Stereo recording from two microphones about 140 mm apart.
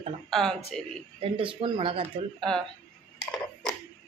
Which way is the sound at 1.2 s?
40° right (ahead or behind).